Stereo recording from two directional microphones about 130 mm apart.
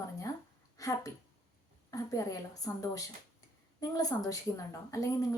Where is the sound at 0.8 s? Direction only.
25° left (ahead or behind).